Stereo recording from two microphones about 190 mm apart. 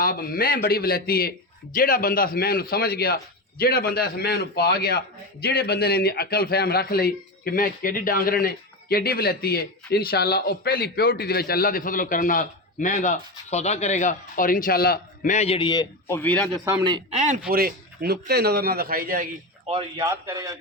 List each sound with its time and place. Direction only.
0.0 s a man's voice: 50° left (ahead or behind); by 16.1 s 20° left (ahead or behind)
16.1 s a man's voice: 10° left (ahead or behind)
16.8 s speech: 25° right (ahead or behind)
17.2 s speech: 40° right (ahead or behind)
17.5 s a man's voice: 50° right (ahead or behind)
20.0 s a man's voice: 15° right (ahead or behind)